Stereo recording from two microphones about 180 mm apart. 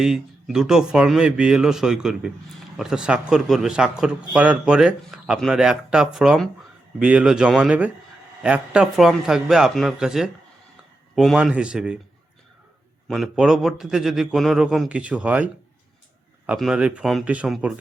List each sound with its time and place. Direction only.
0.0 s a man's voice: 5° right (ahead or behind)
13.1 s a man's voice: centre (ahead or behind)
16.5 s a man's voice: 5° right (ahead or behind)